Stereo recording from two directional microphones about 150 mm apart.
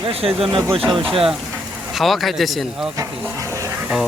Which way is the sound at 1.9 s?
Centre (ahead or behind).